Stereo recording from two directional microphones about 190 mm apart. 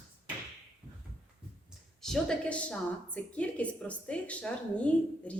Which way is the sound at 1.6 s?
Centre (ahead or behind).